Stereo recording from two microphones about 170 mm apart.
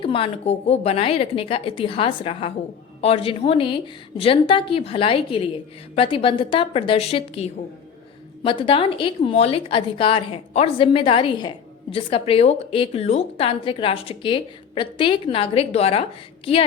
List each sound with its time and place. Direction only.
0.0 s a woman's voice: 30° left (ahead or behind)